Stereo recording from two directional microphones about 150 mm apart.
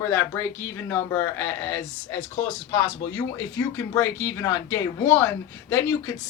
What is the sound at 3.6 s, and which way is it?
Speech, 20° left (ahead or behind).